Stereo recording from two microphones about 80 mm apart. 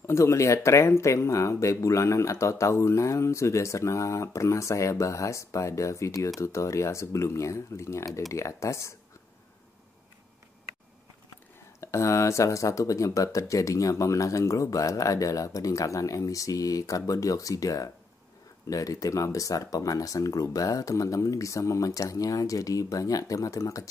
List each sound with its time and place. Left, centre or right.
0.0 s speech: left
11.8 s speech: left